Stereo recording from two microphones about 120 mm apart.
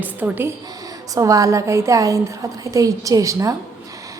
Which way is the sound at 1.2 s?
30° right (ahead or behind).